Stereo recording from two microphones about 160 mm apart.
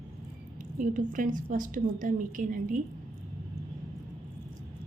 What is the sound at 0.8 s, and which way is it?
A woman's voice, 55° right (ahead or behind).